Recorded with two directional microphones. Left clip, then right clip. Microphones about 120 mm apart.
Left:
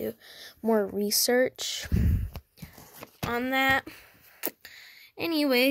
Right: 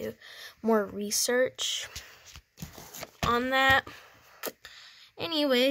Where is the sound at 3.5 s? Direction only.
20° left (ahead or behind).